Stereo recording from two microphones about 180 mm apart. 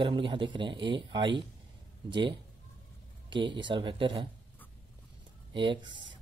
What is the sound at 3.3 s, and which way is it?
A man's voice, 25° right (ahead or behind).